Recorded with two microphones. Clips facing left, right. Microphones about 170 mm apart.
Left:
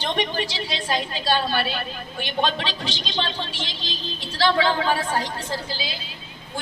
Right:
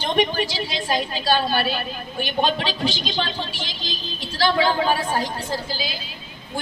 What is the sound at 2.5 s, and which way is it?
A woman's voice, 25° left (ahead or behind).